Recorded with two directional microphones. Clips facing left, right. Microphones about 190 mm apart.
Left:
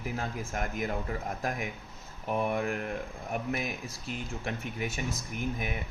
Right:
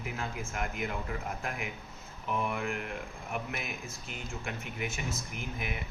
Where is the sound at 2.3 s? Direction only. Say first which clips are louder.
Left 4 dB; 40° left (ahead or behind).